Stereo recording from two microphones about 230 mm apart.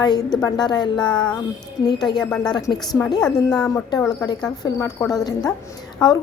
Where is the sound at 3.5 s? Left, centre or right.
Centre.